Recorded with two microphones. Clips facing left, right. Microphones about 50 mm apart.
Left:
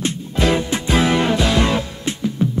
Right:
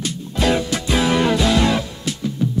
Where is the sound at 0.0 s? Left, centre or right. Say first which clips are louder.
Left 1 dB; left.